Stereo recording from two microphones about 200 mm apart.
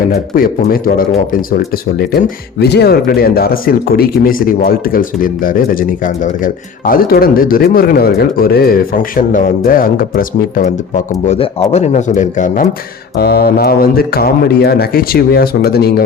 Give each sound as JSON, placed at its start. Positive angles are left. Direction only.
{"t": 0.1, "sound": "a man's voice", "side_deg": 45}
{"t": 13.1, "sound": "speech", "side_deg": 55}